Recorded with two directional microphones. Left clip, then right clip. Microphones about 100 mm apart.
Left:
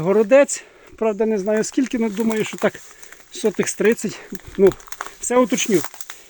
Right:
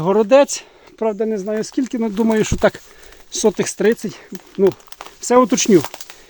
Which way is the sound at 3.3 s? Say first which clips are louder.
Right 4 dB; 50° right (ahead or behind).